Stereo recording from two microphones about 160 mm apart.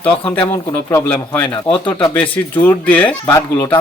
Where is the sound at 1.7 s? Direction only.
30° left (ahead or behind).